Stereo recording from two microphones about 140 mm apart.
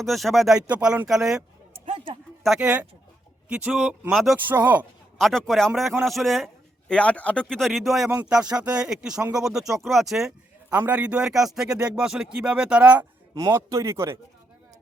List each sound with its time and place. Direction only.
0.0 s speech: centre (ahead or behind)
4.4 s speech: 10° right (ahead or behind)
5.1 s speech: centre (ahead or behind)
13.3 s speech: 25° right (ahead or behind)